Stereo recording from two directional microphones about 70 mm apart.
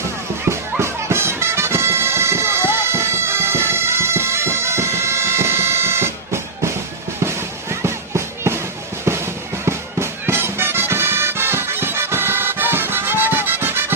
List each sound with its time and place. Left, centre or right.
0.5 s bagpipes: right
7.3 s music: right
9.6 s music: right